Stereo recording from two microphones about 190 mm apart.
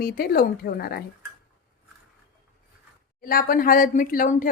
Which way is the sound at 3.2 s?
50° left (ahead or behind).